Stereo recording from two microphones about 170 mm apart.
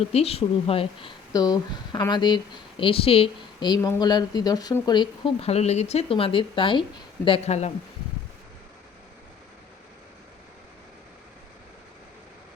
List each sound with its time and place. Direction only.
0.0 s speech: 35° left (ahead or behind)
1.3 s speech: 20° left (ahead or behind)
3.8 s speech: 20° left (ahead or behind); by 7.7 s 40° left (ahead or behind)